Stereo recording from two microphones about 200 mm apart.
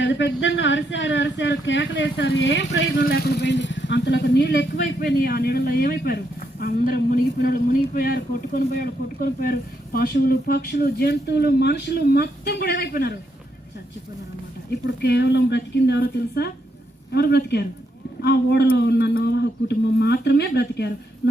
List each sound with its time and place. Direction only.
0.0 s speech: 60° left (ahead or behind)
15.0 s speech: 55° left (ahead or behind)